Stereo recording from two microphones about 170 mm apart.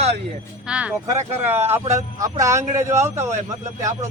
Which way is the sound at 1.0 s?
20° right (ahead or behind).